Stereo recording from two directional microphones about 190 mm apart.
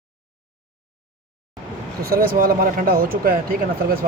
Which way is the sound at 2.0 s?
50° right (ahead or behind).